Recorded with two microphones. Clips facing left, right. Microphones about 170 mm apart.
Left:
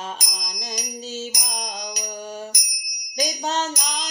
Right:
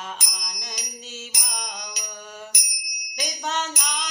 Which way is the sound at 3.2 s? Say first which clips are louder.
Left 4 dB; 35° left (ahead or behind).